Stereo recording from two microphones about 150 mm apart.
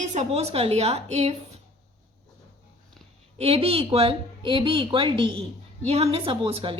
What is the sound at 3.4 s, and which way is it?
A woman's voice, 40° right (ahead or behind).